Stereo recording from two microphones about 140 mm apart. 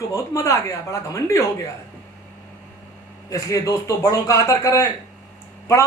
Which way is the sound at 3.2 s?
20° left (ahead or behind).